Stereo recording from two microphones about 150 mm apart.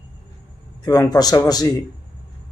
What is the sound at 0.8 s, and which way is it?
Speech, 25° left (ahead or behind).